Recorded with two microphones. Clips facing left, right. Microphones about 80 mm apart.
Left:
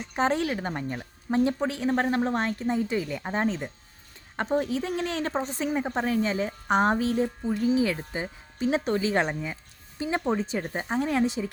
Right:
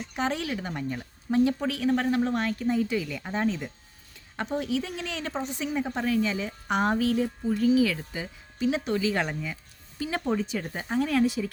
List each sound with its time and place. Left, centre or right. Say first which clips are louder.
0.0 s a woman's voice: left 4 dB; left